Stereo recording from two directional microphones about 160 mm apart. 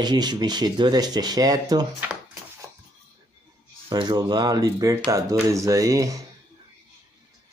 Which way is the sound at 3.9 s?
25° right (ahead or behind).